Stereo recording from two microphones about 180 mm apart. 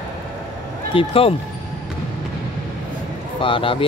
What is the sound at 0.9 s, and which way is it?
Speech, 30° left (ahead or behind).